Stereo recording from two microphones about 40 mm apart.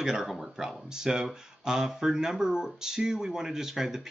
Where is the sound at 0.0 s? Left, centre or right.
Centre.